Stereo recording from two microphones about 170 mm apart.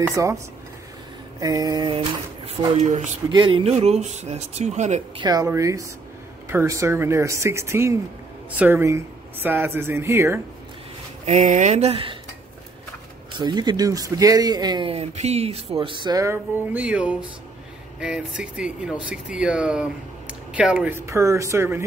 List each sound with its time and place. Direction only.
0.0 s speech: 20° right (ahead or behind)
1.4 s speech: 20° right (ahead or behind); by 3.2 s 45° right (ahead or behind)
3.3 s speech: 30° right (ahead or behind)
5.2 s speech: 20° right (ahead or behind)
11.2 s speech: 45° right (ahead or behind)
13.4 s speech: 25° right (ahead or behind)